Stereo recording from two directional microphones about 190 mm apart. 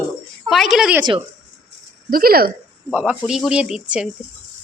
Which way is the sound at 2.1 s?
50° right (ahead or behind).